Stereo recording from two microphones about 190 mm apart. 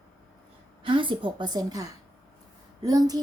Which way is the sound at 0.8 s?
25° right (ahead or behind).